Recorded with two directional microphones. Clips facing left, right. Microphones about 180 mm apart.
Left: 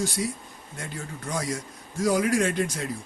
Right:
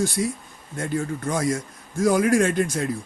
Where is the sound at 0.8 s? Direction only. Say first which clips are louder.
Right 11 dB; 50° right (ahead or behind).